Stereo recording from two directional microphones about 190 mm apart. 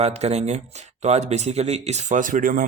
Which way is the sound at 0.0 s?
35° right (ahead or behind).